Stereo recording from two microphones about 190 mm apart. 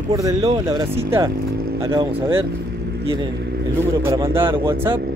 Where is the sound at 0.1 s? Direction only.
20° right (ahead or behind).